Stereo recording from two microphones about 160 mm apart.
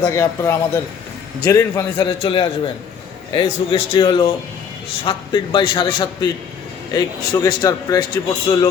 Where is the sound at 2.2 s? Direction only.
30° left (ahead or behind).